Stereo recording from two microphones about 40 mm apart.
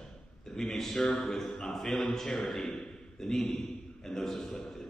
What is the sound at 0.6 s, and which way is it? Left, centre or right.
A man's voice, centre.